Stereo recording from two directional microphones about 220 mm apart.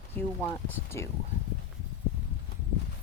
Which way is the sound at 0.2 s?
10° left (ahead or behind).